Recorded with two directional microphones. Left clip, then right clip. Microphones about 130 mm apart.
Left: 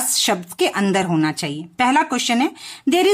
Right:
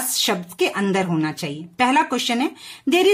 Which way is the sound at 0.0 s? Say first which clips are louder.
Left 2 dB; 30° left (ahead or behind).